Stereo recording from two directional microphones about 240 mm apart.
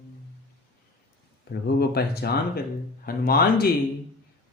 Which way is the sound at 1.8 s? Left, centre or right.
Left.